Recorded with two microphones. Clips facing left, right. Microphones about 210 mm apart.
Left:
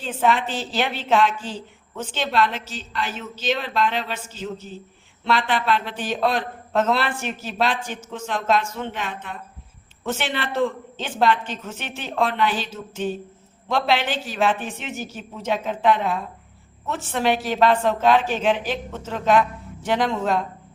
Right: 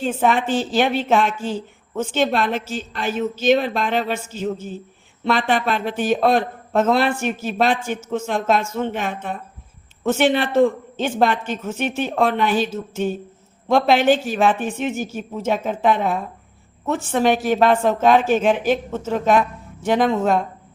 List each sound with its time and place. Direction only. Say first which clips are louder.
0.0 s speech: right 3 dB; 50° right (ahead or behind)